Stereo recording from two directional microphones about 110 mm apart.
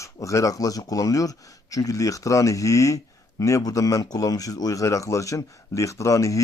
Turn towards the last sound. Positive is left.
turn(degrees=30)  # may be behind; listen again after turning